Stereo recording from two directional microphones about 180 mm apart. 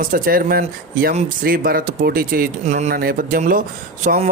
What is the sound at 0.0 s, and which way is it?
Speech, 50° right (ahead or behind).